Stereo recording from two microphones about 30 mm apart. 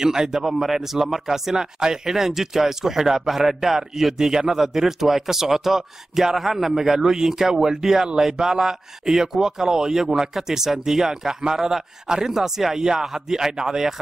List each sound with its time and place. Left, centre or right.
0.0 s a man's voice: right